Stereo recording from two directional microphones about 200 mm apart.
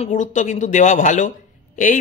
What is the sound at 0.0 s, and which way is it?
Speech, 40° left (ahead or behind).